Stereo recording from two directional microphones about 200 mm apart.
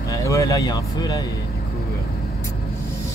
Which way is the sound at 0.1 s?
15° left (ahead or behind).